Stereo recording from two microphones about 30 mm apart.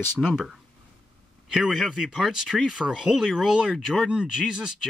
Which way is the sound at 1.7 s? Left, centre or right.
Centre.